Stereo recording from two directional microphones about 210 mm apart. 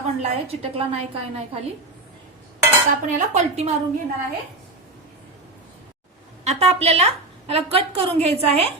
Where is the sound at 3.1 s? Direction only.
35° right (ahead or behind).